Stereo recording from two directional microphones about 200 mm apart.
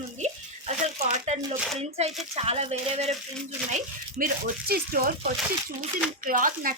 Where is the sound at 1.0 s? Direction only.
35° right (ahead or behind).